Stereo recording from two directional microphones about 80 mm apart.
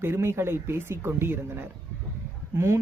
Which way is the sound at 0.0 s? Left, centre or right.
Right.